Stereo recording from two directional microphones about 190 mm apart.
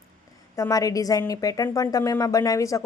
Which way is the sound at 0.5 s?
15° left (ahead or behind).